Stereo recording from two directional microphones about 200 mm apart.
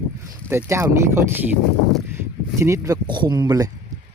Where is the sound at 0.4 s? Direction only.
15° right (ahead or behind).